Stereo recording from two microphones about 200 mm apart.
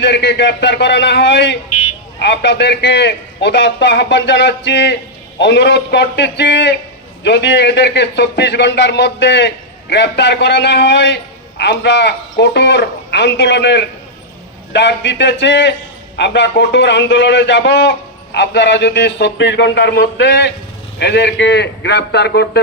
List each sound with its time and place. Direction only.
0.0 s a man's voice: 55° left (ahead or behind)